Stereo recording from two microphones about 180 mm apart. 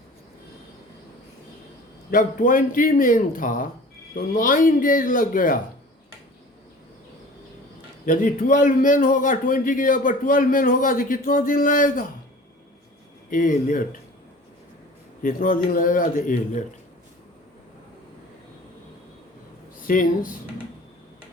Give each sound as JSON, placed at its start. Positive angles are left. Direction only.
{"t": 2.0, "sound": "a man's voice", "side_deg": 50}
{"t": 8.0, "sound": "a man's voice", "side_deg": 50}
{"t": 13.3, "sound": "a man's voice", "side_deg": 45}
{"t": 15.2, "sound": "a man's voice", "side_deg": 50}
{"t": 19.9, "sound": "a man's voice", "side_deg": 45}